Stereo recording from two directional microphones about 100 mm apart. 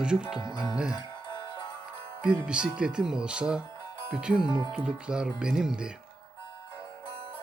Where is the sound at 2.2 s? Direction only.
10° right (ahead or behind).